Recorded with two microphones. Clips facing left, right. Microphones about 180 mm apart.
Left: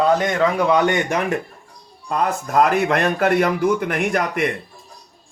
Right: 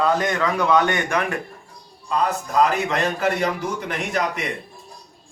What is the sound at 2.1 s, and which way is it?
A man's voice, 55° left (ahead or behind).